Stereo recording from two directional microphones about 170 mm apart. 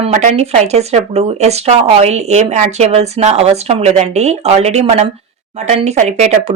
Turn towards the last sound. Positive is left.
turn(degrees=-40)  # may be behind; listen again after turning